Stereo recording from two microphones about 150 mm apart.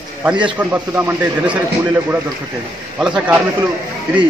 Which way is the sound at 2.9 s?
5° right (ahead or behind).